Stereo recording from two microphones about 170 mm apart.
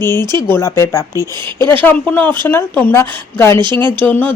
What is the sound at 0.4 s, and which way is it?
Speech, 15° left (ahead or behind).